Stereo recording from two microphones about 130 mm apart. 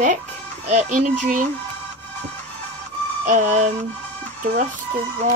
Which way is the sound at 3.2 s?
70° right (ahead or behind).